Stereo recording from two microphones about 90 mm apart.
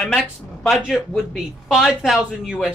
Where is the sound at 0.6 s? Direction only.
5° right (ahead or behind).